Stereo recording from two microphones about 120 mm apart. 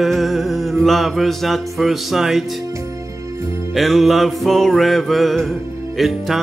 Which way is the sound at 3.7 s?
Centre (ahead or behind).